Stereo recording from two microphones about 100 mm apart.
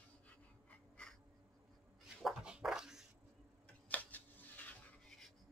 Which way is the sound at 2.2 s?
5° right (ahead or behind).